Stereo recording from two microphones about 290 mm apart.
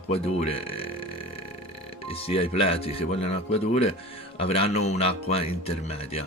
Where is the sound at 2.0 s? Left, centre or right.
Centre.